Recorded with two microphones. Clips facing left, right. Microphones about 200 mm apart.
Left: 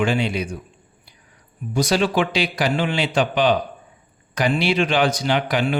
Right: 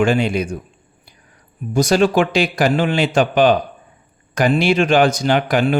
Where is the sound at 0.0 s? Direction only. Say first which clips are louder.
Right 5 dB; 45° right (ahead or behind).